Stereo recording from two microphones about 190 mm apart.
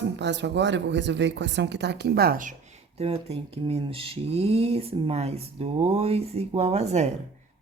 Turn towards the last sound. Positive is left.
turn(degrees=-35)  # may be behind; listen again after turning